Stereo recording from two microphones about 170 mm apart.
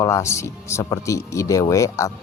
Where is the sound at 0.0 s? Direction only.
15° left (ahead or behind).